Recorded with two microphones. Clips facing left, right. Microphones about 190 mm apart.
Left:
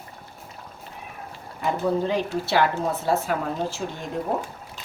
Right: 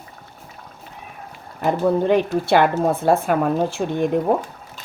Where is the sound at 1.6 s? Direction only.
60° right (ahead or behind).